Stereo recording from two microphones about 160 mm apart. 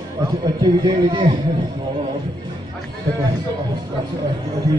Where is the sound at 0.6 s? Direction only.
30° right (ahead or behind).